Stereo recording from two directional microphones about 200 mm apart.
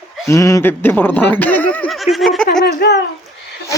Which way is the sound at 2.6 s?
55° left (ahead or behind).